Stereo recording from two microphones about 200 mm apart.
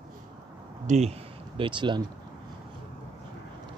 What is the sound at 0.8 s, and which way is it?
Speech, 35° right (ahead or behind).